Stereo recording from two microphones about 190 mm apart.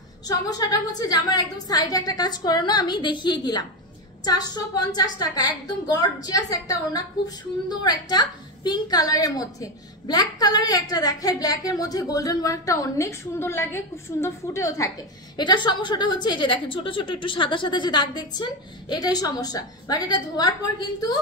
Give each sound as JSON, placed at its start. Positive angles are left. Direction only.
{"t": 0.3, "sound": "a woman's voice", "side_deg": 20}